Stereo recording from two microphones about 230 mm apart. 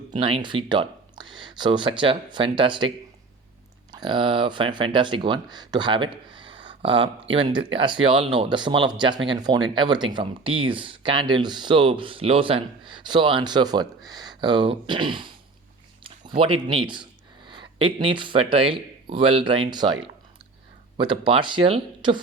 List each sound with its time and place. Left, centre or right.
0.1 s speech: right
3.9 s speech: centre